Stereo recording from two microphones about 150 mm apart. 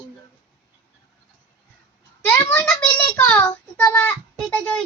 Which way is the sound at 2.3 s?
15° left (ahead or behind).